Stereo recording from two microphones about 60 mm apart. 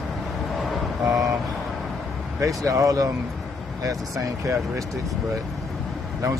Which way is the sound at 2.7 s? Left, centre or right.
Right.